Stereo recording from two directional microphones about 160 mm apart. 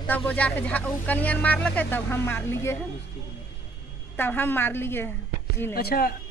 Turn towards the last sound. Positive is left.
turn(degrees=70)  # may be behind; listen again after turning